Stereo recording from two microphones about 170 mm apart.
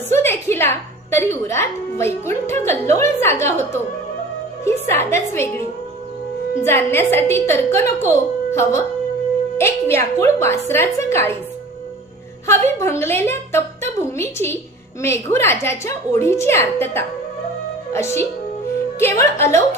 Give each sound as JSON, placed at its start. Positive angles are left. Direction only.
{"t": 0.1, "sound": "a woman's voice", "side_deg": 15}
{"t": 6.6, "sound": "a woman's voice", "side_deg": 15}
{"t": 12.5, "sound": "a woman's voice", "side_deg": 15}